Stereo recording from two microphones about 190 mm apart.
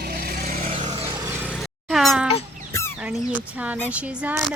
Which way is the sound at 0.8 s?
25° right (ahead or behind).